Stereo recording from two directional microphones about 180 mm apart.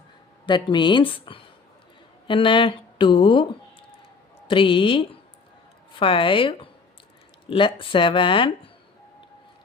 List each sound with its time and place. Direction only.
0.4 s speech: 25° left (ahead or behind)